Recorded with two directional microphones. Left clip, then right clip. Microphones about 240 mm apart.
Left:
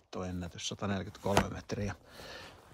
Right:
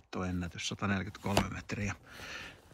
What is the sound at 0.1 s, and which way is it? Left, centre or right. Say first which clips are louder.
Speech: right 2 dB; centre.